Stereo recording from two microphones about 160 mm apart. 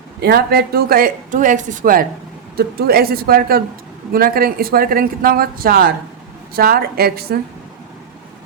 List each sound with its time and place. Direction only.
0.2 s speech: 75° right (ahead or behind)
2.6 s speech: 75° right (ahead or behind)